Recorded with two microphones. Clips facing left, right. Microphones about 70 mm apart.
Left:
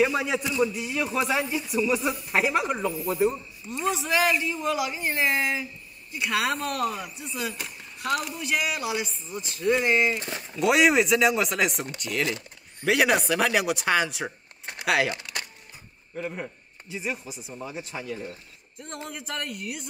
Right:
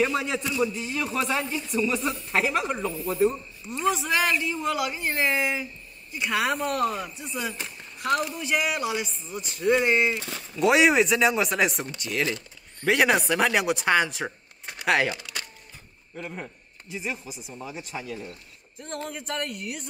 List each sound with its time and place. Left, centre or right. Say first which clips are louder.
0.0 s a man's voice: left 1 dB; centre
3.6 s speech: right 2 dB; centre
16.2 s speech: left 3 dB; centre